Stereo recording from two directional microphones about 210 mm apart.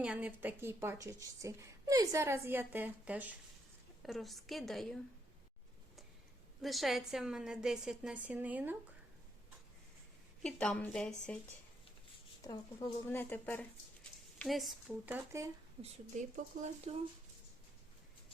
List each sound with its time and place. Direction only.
0.0 s a woman's voice: 5° right (ahead or behind)
6.6 s speech: centre (ahead or behind)
10.4 s speech: 5° left (ahead or behind)
12.5 s speech: 10° left (ahead or behind); by 15.4 s 10° right (ahead or behind)
16.1 s speech: 35° right (ahead or behind)